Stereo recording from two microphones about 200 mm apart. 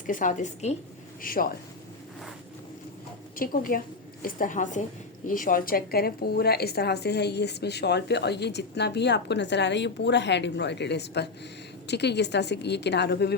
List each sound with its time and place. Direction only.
0.1 s a woman's voice: 40° left (ahead or behind)
1.2 s speech: 45° left (ahead or behind)
3.3 s a woman's voice: 45° left (ahead or behind)